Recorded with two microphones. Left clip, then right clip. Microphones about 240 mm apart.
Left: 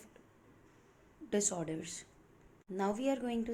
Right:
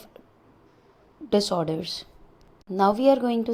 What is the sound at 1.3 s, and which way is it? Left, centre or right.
A woman's voice, right.